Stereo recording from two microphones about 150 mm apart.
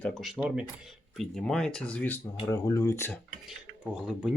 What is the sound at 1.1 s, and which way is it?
Speech, 5° left (ahead or behind).